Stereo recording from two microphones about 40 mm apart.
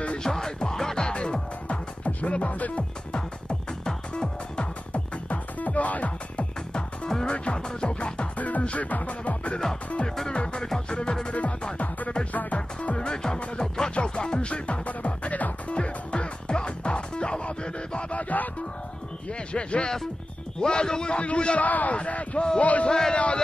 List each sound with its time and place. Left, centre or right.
0.2 s music: centre; by 3.2 s left
3.2 s music: left
6.7 s music: centre
8.4 s music: left
10.0 s music: centre
12.3 s speech: left
12.9 s music: left
19.5 s music: left
21.6 s a man's voice: left
21.9 s music: left
22.8 s a man's voice: centre
23.1 s music: left